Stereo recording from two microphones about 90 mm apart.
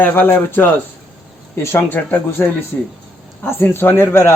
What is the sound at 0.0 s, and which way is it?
A man's voice, 20° left (ahead or behind).